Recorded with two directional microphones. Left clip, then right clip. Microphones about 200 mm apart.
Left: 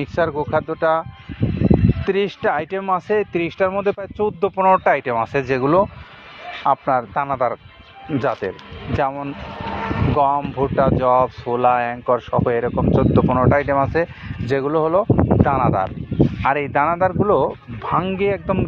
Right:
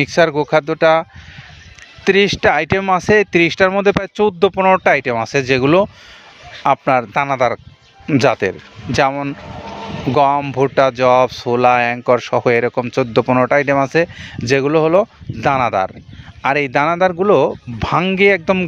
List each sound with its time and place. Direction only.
0.0 s speech: 60° right (ahead or behind)
2.0 s speech: 60° right (ahead or behind)
6.6 s speech: 75° right (ahead or behind)
16.4 s speech: 85° right; by 18.7 s 65° right (ahead or behind)